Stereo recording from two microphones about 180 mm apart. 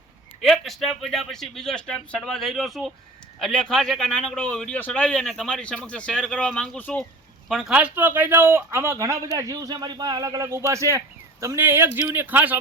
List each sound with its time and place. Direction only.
0.4 s a man's voice: centre (ahead or behind)